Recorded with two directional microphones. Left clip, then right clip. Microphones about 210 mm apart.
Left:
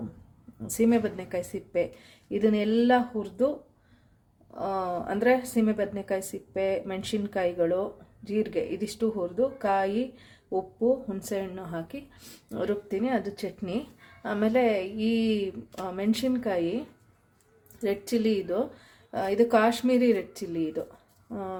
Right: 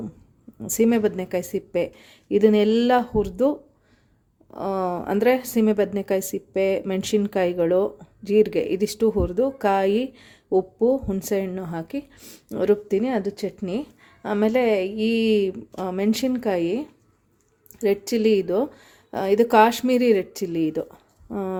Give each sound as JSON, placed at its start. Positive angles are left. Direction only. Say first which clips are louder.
{"t": 0.7, "sound": "a woman's voice", "louder": "right 5 dB", "side_deg": -40}
{"t": 4.5, "sound": "a woman's voice", "louder": "right 4 dB", "side_deg": -40}